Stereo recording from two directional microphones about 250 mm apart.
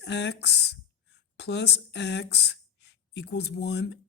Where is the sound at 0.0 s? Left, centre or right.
Left.